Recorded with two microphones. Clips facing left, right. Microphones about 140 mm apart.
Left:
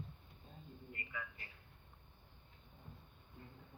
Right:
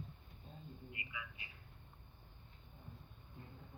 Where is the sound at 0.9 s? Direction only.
45° left (ahead or behind).